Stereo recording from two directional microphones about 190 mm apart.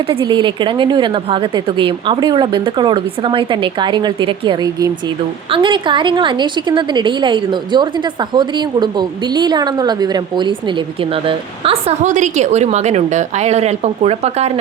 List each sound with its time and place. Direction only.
0.0 s a woman's voice: 25° right (ahead or behind)